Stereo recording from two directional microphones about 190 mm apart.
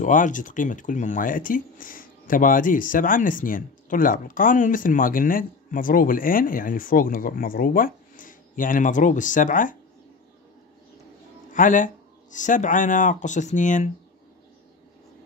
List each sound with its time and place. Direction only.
0.0 s speech: 40° left (ahead or behind)
11.5 s speech: 45° left (ahead or behind)